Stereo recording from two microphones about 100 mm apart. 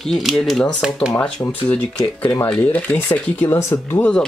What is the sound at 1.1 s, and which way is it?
Speech, 15° left (ahead or behind).